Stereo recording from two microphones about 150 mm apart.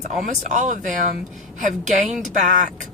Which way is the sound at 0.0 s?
55° right (ahead or behind).